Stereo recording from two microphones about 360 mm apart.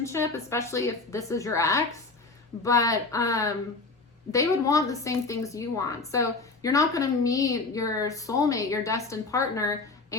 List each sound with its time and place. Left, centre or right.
0.0 s a woman's voice: centre